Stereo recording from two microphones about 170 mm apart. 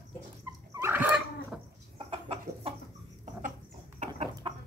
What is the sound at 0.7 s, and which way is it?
Dog, 15° right (ahead or behind).